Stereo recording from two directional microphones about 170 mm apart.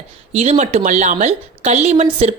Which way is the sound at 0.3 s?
40° right (ahead or behind).